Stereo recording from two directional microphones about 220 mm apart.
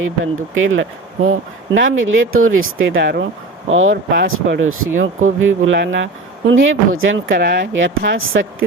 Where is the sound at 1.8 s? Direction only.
60° right (ahead or behind).